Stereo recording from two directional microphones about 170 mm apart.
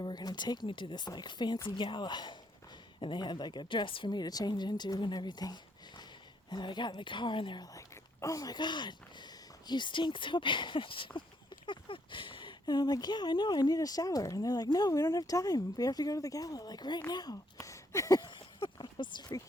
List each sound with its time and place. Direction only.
0.0 s speech: 25° left (ahead or behind)
17.1 s a sound: 25° left (ahead or behind)
19.1 s speech: 25° left (ahead or behind)